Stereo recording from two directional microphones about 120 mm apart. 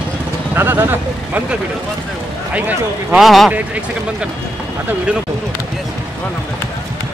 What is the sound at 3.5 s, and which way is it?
Speech, 10° right (ahead or behind).